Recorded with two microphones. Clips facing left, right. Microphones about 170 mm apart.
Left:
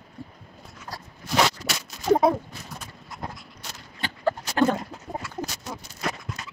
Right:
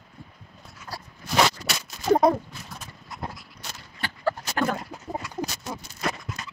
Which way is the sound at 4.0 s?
20° left (ahead or behind).